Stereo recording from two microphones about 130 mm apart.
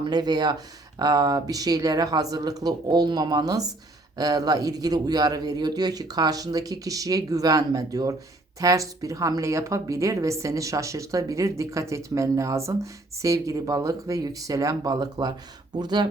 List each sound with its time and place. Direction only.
0.0 s a woman's voice: 30° right (ahead or behind)